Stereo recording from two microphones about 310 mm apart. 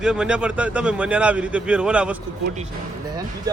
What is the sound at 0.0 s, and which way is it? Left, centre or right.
A man's voice, centre.